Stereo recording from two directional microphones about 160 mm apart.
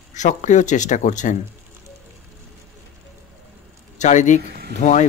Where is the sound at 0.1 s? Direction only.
50° left (ahead or behind).